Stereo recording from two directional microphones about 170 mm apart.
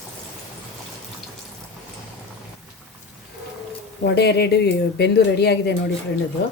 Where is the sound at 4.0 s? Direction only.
75° left (ahead or behind).